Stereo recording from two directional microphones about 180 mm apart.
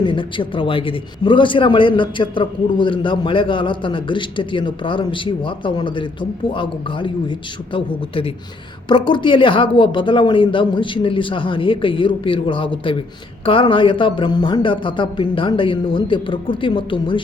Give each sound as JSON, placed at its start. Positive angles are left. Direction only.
{"t": 0.0, "sound": "a man's voice", "side_deg": 25}